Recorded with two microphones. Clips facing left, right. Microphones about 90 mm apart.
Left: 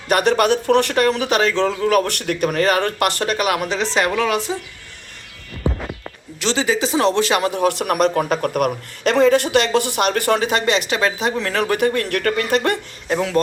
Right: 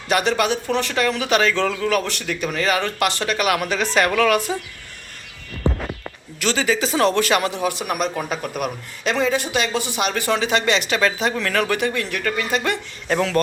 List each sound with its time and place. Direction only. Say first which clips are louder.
0.1 s speech: left 4 dB; 50° left (ahead or behind)
1.0 s speech: left 2 dB; 35° left (ahead or behind)
2.0 s speech: left 5 dB; 55° left (ahead or behind); by 4.5 s 25° left (ahead or behind)
6.4 s speech: left 1 dB; 30° left (ahead or behind)
7.5 s speech: left 5 dB; 60° left (ahead or behind); by 11.6 s 25° left (ahead or behind)
11.6 s speech: left 4 dB; 40° left (ahead or behind)
12.0 s speech: left 4 dB; 60° left (ahead or behind)
13.1 s speech: even; 10° left (ahead or behind)